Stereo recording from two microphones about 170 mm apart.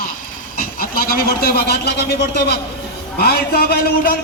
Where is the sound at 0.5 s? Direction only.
60° left (ahead or behind).